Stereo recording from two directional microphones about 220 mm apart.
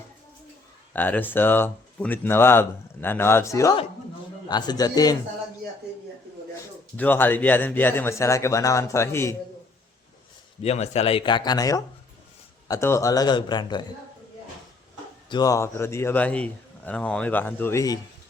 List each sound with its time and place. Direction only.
0.9 s speech: 10° left (ahead or behind)
6.9 s speech: 10° left (ahead or behind)
10.6 s speech: 30° left (ahead or behind)
15.3 s speech: 15° left (ahead or behind)